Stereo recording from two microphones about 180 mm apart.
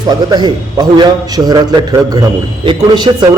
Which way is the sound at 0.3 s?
25° right (ahead or behind).